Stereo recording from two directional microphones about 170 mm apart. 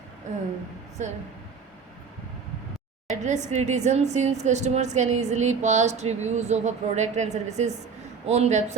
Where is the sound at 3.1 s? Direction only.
45° right (ahead or behind).